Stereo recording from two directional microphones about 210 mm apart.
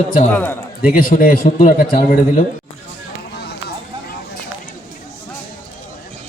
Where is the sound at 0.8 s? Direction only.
40° left (ahead or behind).